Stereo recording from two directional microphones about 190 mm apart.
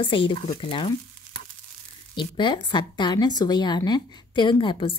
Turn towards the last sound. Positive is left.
turn(degrees=25)  # may be behind; listen again after turning